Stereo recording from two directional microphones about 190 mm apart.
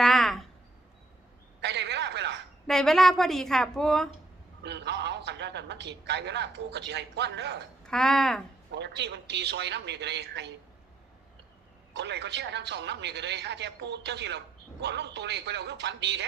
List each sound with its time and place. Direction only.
0.0 s a sound: centre (ahead or behind)
1.6 s a sound: 65° right (ahead or behind)
2.6 s a woman's voice: centre (ahead or behind)
4.6 s a man's voice: 65° right (ahead or behind)
7.9 s a woman's voice: centre (ahead or behind)
8.7 s speech: 65° right (ahead or behind)
11.9 s speech: 65° right (ahead or behind)